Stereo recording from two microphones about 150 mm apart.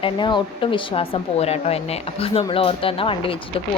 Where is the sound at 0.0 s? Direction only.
30° left (ahead or behind).